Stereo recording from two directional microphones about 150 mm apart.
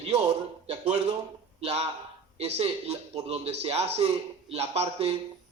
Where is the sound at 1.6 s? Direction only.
45° right (ahead or behind).